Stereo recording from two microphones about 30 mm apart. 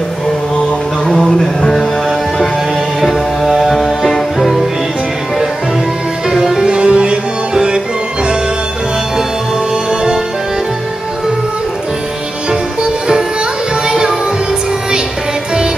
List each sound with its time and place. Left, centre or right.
1.0 s a sound: centre
3.0 s music: centre
6.3 s music: centre
6.6 s music: right
9.8 s music: right
12.4 s music: right